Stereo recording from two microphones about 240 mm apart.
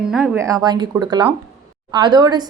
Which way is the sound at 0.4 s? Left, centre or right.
Centre.